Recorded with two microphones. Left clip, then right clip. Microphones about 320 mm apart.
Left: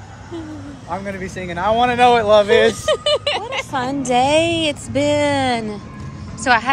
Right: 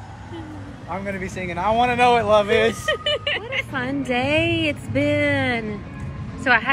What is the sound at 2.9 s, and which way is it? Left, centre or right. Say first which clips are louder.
Speech: left 5 dB; centre.